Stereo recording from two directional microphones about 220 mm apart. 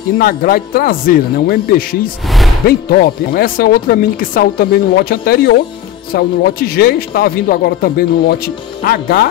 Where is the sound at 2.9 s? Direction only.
40° left (ahead or behind).